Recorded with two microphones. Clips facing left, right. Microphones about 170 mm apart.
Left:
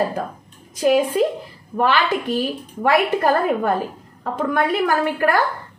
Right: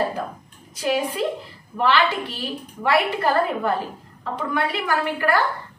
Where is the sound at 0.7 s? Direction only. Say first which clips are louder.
Left 7 dB; 50° left (ahead or behind).